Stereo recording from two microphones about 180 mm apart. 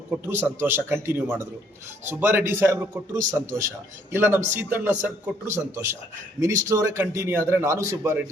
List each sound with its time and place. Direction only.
0.1 s a man's voice: 10° right (ahead or behind)